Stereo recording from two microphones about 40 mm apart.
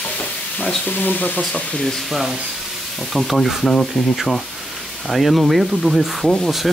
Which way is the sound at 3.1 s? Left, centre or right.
Centre.